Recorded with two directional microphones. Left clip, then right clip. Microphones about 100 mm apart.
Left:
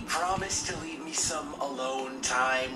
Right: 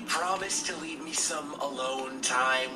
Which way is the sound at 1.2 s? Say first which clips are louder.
Left 1 dB; 35° right (ahead or behind).